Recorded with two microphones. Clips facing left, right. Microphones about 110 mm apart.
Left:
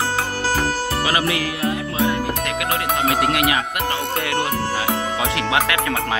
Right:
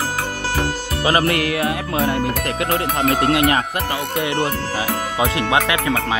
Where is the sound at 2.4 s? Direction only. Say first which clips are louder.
Right 2 dB; 35° right (ahead or behind).